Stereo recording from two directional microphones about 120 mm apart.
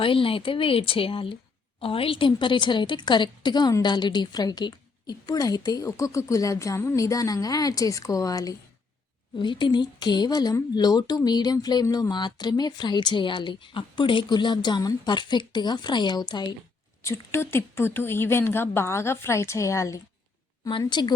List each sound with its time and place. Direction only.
0.0 s speech: 45° left (ahead or behind)
17.0 s speech: 20° left (ahead or behind)
20.7 s speech: 40° left (ahead or behind)